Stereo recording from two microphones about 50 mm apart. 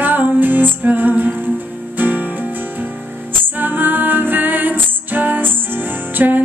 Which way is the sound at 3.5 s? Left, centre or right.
Right.